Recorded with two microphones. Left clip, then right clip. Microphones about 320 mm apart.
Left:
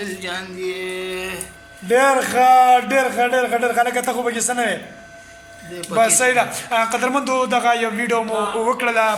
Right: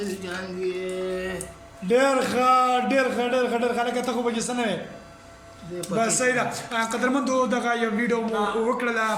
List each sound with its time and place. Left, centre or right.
0.0 s speech: centre
1.9 s a man's voice: centre
6.0 s speech: centre